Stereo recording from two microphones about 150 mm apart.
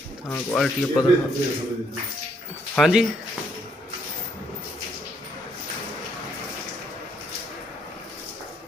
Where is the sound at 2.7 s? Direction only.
Centre (ahead or behind).